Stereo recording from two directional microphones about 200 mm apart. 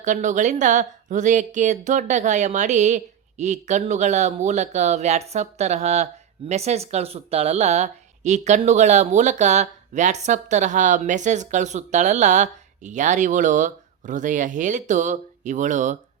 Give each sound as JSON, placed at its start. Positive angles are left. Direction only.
{"t": 0.0, "sound": "speech", "side_deg": -40}